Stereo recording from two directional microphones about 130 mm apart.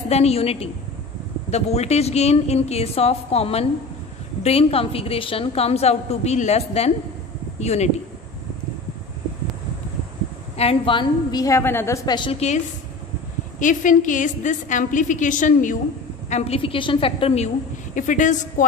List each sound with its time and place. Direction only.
0.1 s a woman's voice: 55° left (ahead or behind)
10.6 s a woman's voice: 45° left (ahead or behind)
11.4 s a woman's voice: 20° left (ahead or behind)
12.1 s a woman's voice: 35° left (ahead or behind)
12.4 s speech: 60° left (ahead or behind)
13.6 s a woman's voice: 80° left
16.3 s a woman's voice: 55° left (ahead or behind)
17.9 s a man's voice: 80° left